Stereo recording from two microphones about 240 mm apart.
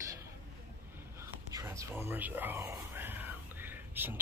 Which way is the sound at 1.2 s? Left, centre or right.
Centre.